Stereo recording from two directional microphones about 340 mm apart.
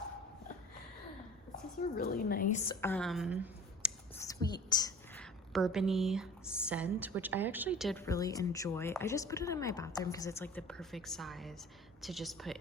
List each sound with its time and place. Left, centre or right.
2.0 s a woman's voice: left
2.8 s speech: centre
4.1 s a woman's voice: centre